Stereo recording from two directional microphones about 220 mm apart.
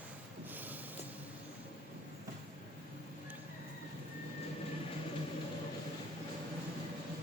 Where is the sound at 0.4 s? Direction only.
10° right (ahead or behind).